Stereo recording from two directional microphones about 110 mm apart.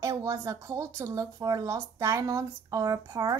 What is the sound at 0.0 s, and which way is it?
Speech, 30° right (ahead or behind).